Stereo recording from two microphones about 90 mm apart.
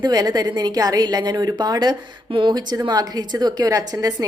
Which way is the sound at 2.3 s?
65° right (ahead or behind).